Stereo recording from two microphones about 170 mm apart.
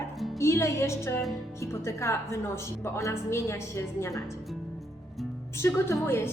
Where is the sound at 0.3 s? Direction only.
15° left (ahead or behind).